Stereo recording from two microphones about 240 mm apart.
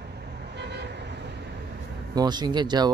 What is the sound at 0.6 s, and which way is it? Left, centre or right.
Vehicle, right.